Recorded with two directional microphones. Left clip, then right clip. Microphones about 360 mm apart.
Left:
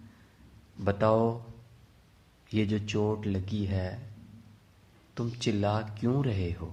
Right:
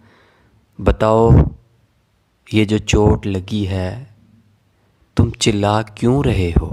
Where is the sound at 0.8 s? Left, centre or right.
Right.